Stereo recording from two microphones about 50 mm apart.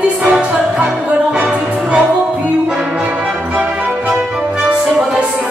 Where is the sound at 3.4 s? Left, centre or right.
Right.